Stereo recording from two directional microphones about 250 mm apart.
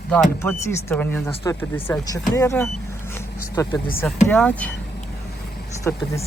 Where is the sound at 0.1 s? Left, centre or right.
Centre.